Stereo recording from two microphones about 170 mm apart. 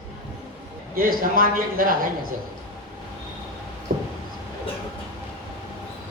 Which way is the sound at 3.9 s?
55° right (ahead or behind).